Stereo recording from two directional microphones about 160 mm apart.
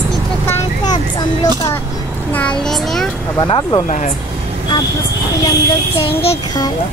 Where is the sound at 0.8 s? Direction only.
25° left (ahead or behind).